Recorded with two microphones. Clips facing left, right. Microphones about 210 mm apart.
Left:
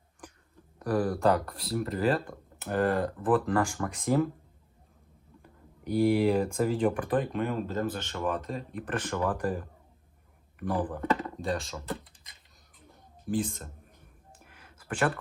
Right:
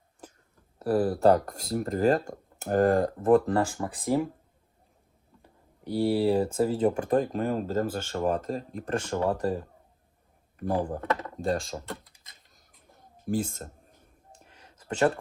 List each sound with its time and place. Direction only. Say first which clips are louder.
0.9 s speech: right 2 dB; 25° right (ahead or behind)
1.2 s speech: right 4 dB; 40° right (ahead or behind)
3.3 s speech: right 4 dB; 30° right (ahead or behind)
5.9 s speech: even; 30° right (ahead or behind)
7.2 s speech: right 3 dB; 45° right (ahead or behind)
8.7 s speech: right 2 dB; 30° right (ahead or behind)
11.4 s speech: right 4 dB; 50° right (ahead or behind)
11.9 s typing: left 3 dB; centre (ahead or behind)
13.2 s speech: right 1 dB; 50° right (ahead or behind)
14.4 s a sound: right 4 dB; 30° right (ahead or behind)